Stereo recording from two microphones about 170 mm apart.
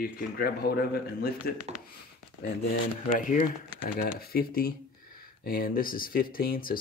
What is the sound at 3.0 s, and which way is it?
Speech, 50° left (ahead or behind).